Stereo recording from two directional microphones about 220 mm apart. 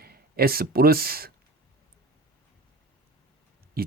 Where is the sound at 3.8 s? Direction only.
45° right (ahead or behind).